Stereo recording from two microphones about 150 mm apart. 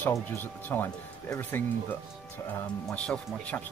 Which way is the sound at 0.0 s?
15° left (ahead or behind).